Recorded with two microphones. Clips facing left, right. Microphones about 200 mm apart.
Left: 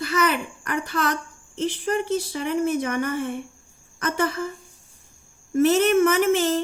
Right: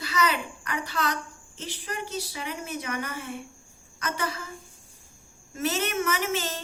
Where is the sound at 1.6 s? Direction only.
50° left (ahead or behind).